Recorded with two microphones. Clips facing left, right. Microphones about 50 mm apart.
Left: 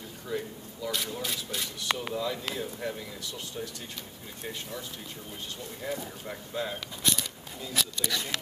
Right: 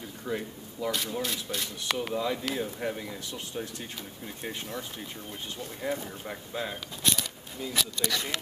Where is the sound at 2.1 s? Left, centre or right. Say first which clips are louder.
Right 2 dB; centre.